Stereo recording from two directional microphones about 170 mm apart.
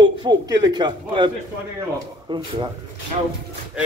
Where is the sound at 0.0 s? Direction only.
25° right (ahead or behind).